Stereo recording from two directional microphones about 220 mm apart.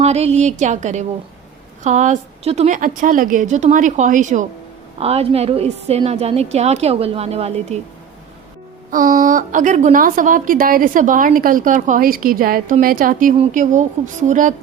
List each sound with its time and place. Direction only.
0.0 s a woman's voice: 30° right (ahead or behind)
8.9 s a woman's voice: 40° right (ahead or behind)